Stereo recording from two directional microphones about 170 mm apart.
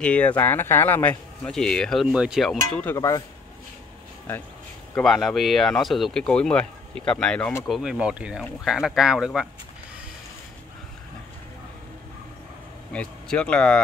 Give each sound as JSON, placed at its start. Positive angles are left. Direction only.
{"t": 0.0, "sound": "speech", "side_deg": 10}
{"t": 3.0, "sound": "speech", "side_deg": 20}
{"t": 4.9, "sound": "speech", "side_deg": 0}
{"t": 12.9, "sound": "speech", "side_deg": 5}